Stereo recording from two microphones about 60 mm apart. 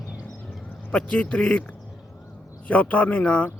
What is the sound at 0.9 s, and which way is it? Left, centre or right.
A man's voice, centre.